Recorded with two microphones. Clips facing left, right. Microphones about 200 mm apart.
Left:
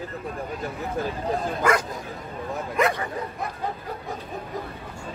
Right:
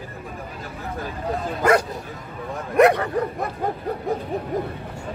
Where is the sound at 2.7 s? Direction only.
65° right (ahead or behind).